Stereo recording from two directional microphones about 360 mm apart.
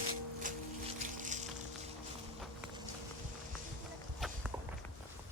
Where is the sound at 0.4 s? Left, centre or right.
Right.